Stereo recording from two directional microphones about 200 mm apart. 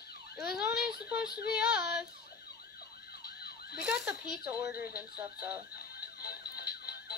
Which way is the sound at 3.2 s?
55° left (ahead or behind).